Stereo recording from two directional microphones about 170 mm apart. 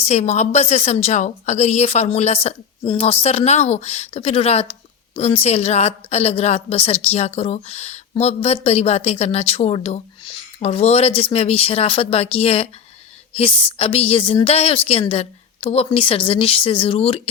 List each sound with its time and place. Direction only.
0.0 s a woman's voice: 40° left (ahead or behind)